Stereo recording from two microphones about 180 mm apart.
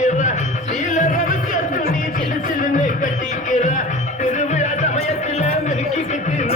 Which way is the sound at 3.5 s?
45° left (ahead or behind).